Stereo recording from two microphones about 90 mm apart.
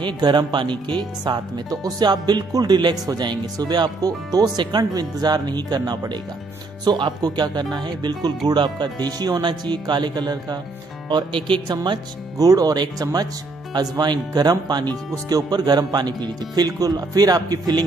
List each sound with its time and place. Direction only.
0.0 s speech: 55° right (ahead or behind)
11.6 s speech: 55° right (ahead or behind)